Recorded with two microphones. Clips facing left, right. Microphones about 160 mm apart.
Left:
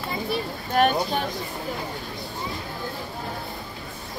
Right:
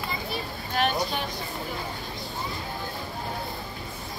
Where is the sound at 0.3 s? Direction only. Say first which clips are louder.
Left 5 dB; 50° left (ahead or behind).